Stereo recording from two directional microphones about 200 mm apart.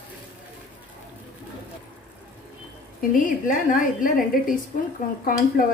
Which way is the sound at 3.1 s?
40° left (ahead or behind).